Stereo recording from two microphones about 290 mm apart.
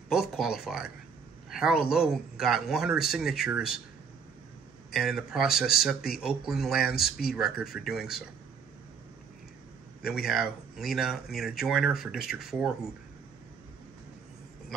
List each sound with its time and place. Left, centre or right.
0.1 s speech: centre
4.9 s speech: centre
10.0 s speech: centre